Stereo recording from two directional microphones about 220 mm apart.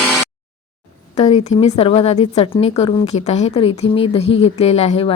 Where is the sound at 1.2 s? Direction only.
30° left (ahead or behind).